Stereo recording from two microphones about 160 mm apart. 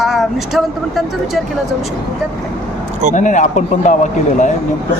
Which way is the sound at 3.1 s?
50° left (ahead or behind).